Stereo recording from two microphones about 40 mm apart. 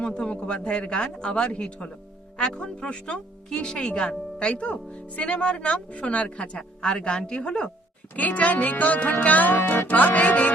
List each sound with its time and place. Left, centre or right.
0.0 s speech: left
8.1 s a woman's voice: left
9.2 s music: left